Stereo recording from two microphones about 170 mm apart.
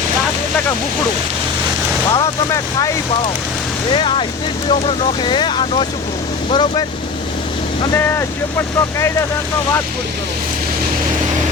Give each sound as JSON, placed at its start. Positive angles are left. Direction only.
{"t": 2.1, "sound": "speech", "side_deg": 20}
{"t": 3.9, "sound": "speech", "side_deg": 30}
{"t": 7.9, "sound": "speech", "side_deg": 15}